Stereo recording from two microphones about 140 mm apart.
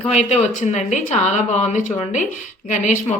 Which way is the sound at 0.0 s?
50° left (ahead or behind).